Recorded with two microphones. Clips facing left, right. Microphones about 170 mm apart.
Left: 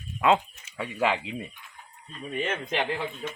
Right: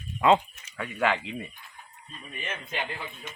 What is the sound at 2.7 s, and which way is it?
Speech, 90° left.